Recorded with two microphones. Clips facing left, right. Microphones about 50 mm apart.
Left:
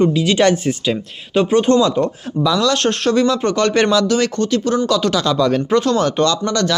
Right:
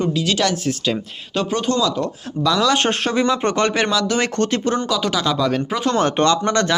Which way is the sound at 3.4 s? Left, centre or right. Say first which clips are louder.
Left 2 dB; right.